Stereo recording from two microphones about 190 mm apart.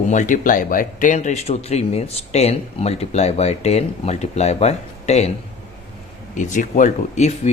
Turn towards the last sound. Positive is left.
turn(degrees=40)  # may be behind; listen again after turning